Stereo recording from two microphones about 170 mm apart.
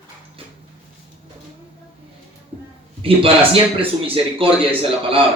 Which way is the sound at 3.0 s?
35° right (ahead or behind).